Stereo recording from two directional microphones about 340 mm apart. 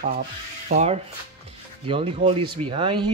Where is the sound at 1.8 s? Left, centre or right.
Centre.